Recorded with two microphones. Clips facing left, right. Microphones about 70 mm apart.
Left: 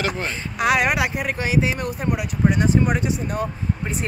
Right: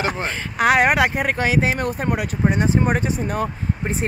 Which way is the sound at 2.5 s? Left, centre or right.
Right.